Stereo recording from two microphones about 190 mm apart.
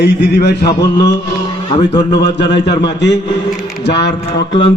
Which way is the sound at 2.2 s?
65° left (ahead or behind).